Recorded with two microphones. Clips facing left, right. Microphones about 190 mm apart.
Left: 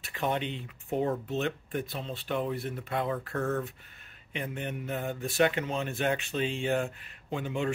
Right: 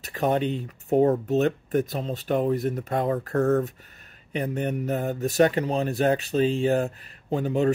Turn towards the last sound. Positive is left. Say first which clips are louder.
# right 9 dB
turn(degrees=-40)  # may be behind; listen again after turning